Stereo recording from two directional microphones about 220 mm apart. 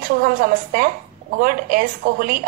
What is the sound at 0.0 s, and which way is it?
A woman's voice, 40° right (ahead or behind).